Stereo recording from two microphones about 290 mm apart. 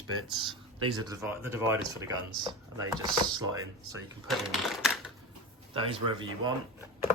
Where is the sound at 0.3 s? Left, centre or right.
Centre.